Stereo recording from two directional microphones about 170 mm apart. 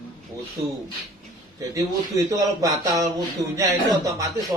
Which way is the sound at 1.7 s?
20° right (ahead or behind).